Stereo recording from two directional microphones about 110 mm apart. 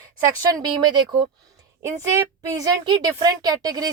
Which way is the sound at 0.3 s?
35° right (ahead or behind).